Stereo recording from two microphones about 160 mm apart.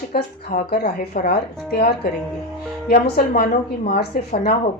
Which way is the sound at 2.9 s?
75° left (ahead or behind).